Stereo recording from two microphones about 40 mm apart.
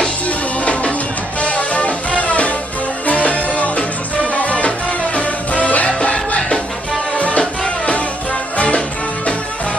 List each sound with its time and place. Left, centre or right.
1.4 s music: left
7.2 s music: left